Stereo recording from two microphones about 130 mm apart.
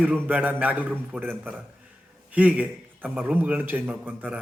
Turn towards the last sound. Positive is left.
turn(degrees=-10)  # may be behind; listen again after turning